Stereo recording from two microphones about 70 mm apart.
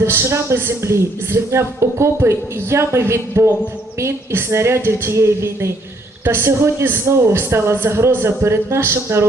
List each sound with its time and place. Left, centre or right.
0.0 s speech: right